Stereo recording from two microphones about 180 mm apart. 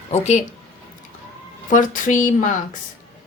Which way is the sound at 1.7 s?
45° left (ahead or behind).